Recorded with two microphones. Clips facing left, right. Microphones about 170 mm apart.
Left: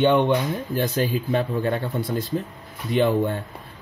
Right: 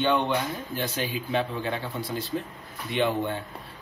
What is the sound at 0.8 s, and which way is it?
Speech, 45° left (ahead or behind).